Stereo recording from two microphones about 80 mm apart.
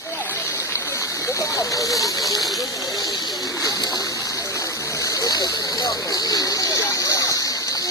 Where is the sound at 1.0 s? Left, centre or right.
Left.